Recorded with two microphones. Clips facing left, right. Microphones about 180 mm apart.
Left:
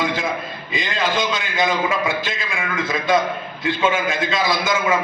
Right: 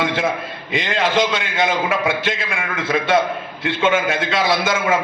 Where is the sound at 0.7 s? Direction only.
70° right (ahead or behind).